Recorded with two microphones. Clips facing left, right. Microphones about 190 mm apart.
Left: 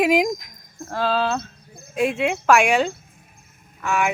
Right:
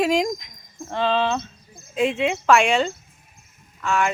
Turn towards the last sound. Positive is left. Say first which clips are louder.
# even
turn(degrees=15)  # may be behind; listen again after turning